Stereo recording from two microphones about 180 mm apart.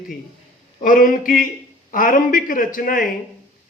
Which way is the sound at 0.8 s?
50° left (ahead or behind).